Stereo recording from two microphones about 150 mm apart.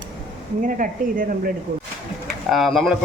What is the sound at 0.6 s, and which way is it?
Speech, 65° right (ahead or behind).